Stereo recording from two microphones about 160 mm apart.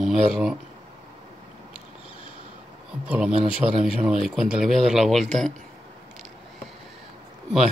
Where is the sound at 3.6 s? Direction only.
20° right (ahead or behind).